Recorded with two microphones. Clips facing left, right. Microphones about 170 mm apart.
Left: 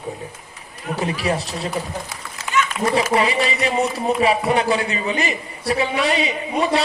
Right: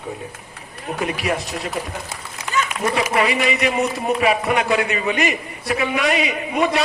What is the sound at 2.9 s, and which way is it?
A man's voice, 30° left (ahead or behind).